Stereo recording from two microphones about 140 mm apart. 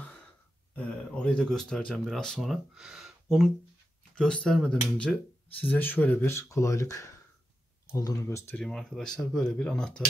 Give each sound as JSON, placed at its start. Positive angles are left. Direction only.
{"t": 0.7, "sound": "speech", "side_deg": 10}
{"t": 8.5, "sound": "speech", "side_deg": 5}